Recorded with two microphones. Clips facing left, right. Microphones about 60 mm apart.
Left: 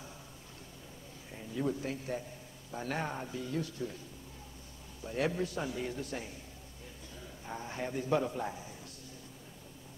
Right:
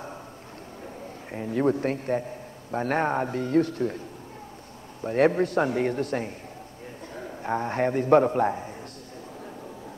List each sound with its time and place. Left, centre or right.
1.3 s a man's voice: right
5.0 s a man's voice: right